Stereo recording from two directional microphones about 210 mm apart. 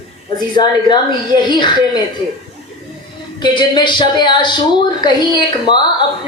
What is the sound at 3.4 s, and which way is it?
Speech, 20° left (ahead or behind).